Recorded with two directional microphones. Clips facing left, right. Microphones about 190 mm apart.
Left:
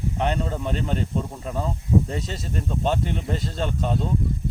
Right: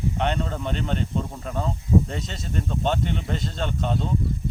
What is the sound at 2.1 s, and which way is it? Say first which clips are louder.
Speech: left 2 dB; 35° left (ahead or behind).